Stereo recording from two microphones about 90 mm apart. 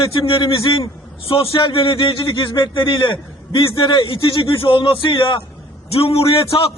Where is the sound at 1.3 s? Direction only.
85° left; by 5.4 s 70° left (ahead or behind).